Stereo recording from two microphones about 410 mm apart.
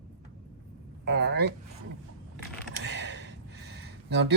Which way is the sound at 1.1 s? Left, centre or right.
Right.